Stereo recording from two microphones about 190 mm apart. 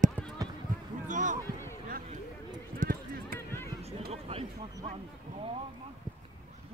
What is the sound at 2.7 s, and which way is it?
Run, 45° right (ahead or behind).